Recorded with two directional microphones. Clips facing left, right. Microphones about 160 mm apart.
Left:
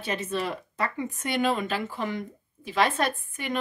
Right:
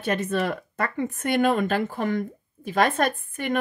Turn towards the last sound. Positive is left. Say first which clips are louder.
# right 4 dB
turn(degrees=-50)  # may be behind; listen again after turning